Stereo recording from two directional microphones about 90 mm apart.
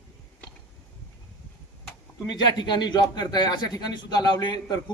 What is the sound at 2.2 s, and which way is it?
Speech, 55° left (ahead or behind).